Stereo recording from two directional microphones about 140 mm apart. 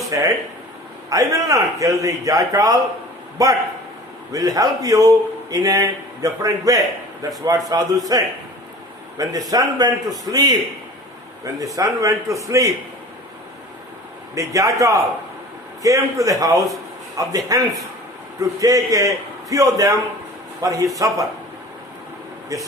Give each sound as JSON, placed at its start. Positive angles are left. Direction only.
{"t": 0.1, "sound": "a man's voice", "side_deg": -25}
{"t": 9.5, "sound": "a man's voice", "side_deg": -25}
{"t": 11.6, "sound": "a man's voice", "side_deg": -25}
{"t": 14.3, "sound": "a man's voice", "side_deg": -25}